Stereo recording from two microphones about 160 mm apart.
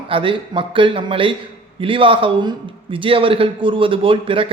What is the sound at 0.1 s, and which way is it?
A man's voice, 35° right (ahead or behind).